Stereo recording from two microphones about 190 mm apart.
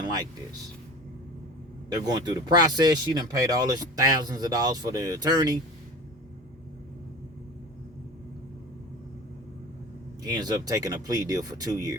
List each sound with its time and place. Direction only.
0.0 s speech: 20° right (ahead or behind)
1.9 s speech: 20° right (ahead or behind)
10.2 s speech: 20° right (ahead or behind)